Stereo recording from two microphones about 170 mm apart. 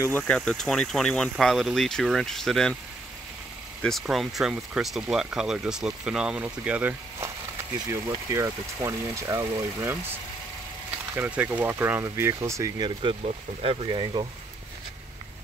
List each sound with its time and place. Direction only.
0.2 s speech: 5° left (ahead or behind)
3.8 s speech: centre (ahead or behind)
8.3 s speech: 15° right (ahead or behind)
11.1 s speech: 10° right (ahead or behind); by 14.2 s 30° right (ahead or behind)